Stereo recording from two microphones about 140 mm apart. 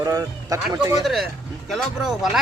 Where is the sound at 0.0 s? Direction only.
25° right (ahead or behind).